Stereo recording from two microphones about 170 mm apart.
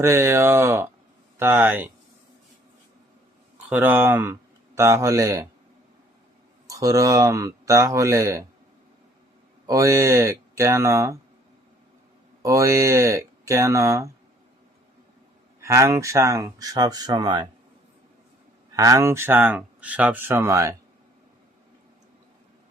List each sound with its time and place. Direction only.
0.0 s speech: 15° right (ahead or behind)
3.7 s speech: 10° right (ahead or behind)
6.7 s speech: 20° right (ahead or behind)
9.6 s speech: 20° right (ahead or behind)
12.4 s speech: 20° right (ahead or behind)
15.6 s speech: 15° right (ahead or behind)
18.7 s speech: 20° right (ahead or behind)